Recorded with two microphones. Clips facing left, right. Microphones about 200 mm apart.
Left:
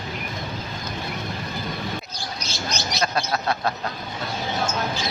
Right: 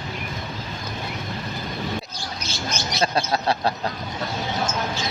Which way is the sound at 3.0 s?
30° right (ahead or behind).